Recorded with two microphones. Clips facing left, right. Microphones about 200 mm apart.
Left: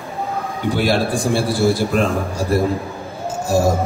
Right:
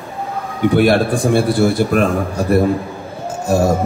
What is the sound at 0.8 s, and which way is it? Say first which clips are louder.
Speech: right 4 dB; 60° right (ahead or behind).